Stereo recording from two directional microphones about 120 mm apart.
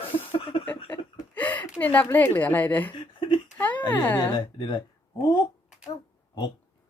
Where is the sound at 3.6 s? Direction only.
15° left (ahead or behind).